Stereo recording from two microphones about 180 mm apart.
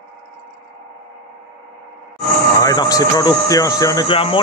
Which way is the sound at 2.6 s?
20° left (ahead or behind).